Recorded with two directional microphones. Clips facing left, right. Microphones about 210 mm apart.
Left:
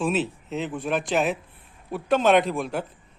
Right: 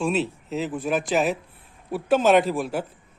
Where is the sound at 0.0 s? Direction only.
Centre (ahead or behind).